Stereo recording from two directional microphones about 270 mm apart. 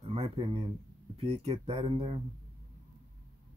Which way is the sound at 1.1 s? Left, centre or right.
Right.